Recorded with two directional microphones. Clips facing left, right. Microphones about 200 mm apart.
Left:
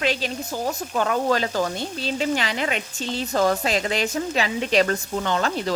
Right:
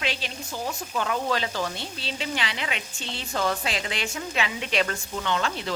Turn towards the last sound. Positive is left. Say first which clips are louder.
# left 4 dB
turn(degrees=40)  # may be behind; listen again after turning